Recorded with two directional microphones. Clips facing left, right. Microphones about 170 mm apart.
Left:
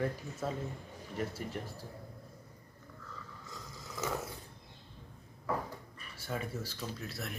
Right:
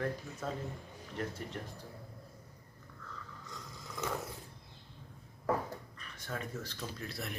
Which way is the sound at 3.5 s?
Centre (ahead or behind).